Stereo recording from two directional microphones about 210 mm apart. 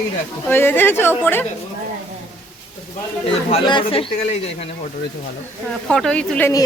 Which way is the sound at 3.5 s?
25° left (ahead or behind).